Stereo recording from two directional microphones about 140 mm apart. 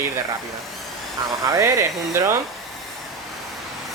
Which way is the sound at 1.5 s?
20° right (ahead or behind).